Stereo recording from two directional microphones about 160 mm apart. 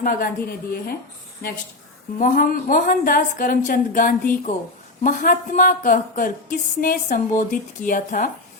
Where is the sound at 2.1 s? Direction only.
60° left (ahead or behind).